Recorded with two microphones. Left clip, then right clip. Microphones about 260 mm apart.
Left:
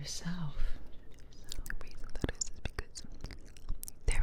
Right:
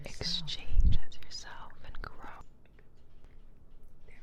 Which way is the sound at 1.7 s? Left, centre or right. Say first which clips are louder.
Left 1 dB; left.